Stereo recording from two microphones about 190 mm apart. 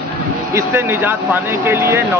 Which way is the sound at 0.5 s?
10° right (ahead or behind).